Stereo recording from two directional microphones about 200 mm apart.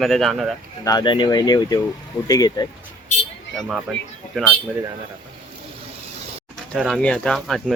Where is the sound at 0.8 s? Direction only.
20° left (ahead or behind).